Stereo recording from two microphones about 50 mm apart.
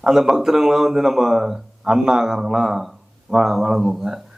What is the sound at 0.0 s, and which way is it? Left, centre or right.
Speech, centre.